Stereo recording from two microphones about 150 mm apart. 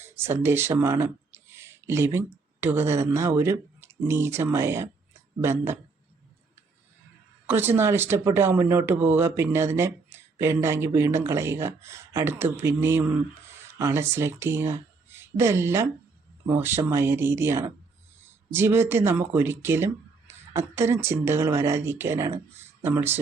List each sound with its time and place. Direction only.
0.0 s a sound: 15° right (ahead or behind)
2.1 s speech: 15° right (ahead or behind)
7.4 s speech: 15° right (ahead or behind)